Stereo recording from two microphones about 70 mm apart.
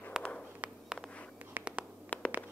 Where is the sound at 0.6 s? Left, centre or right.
Right.